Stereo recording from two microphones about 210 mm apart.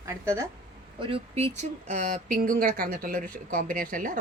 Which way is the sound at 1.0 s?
25° right (ahead or behind).